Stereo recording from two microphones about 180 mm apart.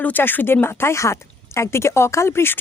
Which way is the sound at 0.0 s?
10° left (ahead or behind).